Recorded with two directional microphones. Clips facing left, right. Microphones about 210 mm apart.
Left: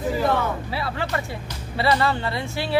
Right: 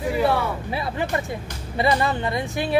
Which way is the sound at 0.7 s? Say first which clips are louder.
Right 2 dB; 20° right (ahead or behind).